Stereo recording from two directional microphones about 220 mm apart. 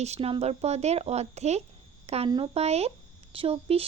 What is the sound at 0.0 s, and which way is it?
Speech, 30° right (ahead or behind).